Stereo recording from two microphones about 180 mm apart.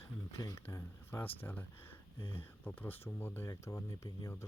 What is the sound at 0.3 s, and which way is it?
Speech, 15° left (ahead or behind).